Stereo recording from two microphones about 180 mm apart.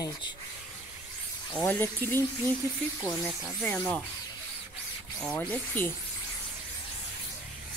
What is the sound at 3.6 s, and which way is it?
Speech, 10° left (ahead or behind).